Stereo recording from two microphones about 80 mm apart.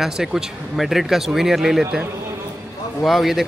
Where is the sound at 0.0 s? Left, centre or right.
Centre.